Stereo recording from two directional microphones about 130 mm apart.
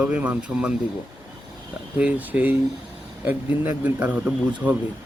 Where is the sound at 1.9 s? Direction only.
10° right (ahead or behind).